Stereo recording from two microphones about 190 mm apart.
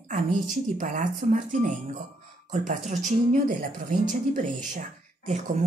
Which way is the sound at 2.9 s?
40° right (ahead or behind).